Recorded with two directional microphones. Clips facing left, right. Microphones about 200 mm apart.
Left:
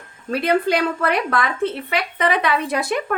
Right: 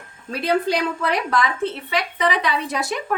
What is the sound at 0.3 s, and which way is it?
A woman's voice, 55° left (ahead or behind).